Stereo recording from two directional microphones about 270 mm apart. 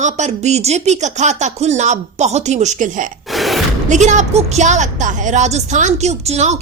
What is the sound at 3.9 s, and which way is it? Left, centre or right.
Speech, right.